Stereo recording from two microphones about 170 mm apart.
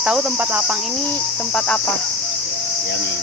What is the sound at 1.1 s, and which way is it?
Cricket, 5° left (ahead or behind).